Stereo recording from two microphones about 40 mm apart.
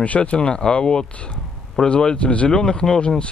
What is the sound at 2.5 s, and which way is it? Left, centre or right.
Speech, centre.